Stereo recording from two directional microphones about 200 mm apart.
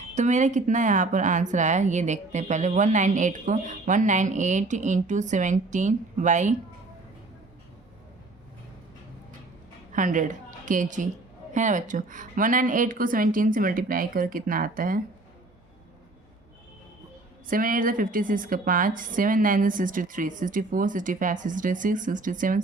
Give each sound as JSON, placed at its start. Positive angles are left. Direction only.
{"t": 0.1, "sound": "a woman's voice", "side_deg": -35}
{"t": 9.9, "sound": "a woman's voice", "side_deg": -40}
{"t": 17.4, "sound": "a woman's voice", "side_deg": -45}